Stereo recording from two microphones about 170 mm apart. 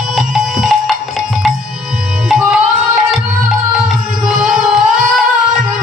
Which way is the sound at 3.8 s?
5° right (ahead or behind).